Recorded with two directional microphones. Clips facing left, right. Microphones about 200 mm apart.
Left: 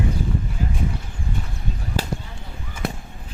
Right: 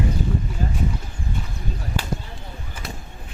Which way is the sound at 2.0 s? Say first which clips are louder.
Left 3 dB; 40° left (ahead or behind).